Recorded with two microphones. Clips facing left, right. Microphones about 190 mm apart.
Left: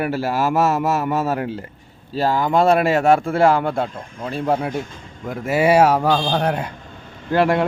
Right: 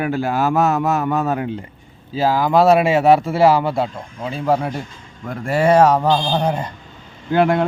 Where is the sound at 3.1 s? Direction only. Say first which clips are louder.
Right 2 dB; 50° left (ahead or behind).